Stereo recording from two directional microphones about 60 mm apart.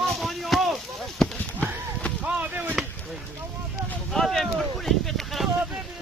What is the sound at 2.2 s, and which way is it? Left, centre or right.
Chop, right.